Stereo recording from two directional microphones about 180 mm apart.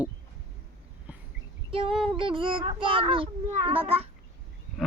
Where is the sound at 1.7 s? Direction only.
30° right (ahead or behind).